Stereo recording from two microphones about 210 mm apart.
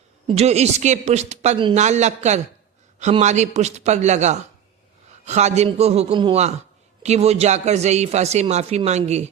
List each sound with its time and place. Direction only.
0.3 s speech: 30° right (ahead or behind)